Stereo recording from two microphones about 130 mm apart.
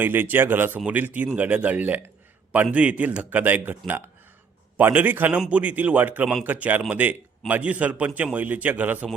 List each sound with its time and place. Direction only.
0.0 s a man's voice: 15° right (ahead or behind)